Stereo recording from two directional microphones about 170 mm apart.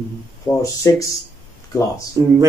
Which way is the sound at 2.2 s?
20° right (ahead or behind).